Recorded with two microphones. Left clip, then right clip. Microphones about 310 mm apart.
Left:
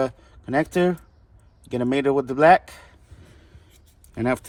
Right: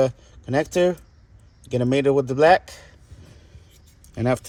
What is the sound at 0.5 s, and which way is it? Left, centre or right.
Speech, left.